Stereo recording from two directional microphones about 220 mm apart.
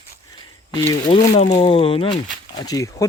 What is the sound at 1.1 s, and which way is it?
Speech, 25° left (ahead or behind).